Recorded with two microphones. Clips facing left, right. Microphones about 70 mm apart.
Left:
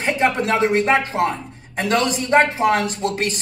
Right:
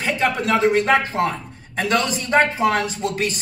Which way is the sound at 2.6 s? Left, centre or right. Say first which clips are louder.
Left 1 dB; centre.